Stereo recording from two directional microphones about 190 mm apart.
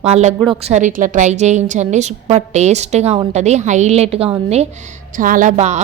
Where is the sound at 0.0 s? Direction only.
35° right (ahead or behind).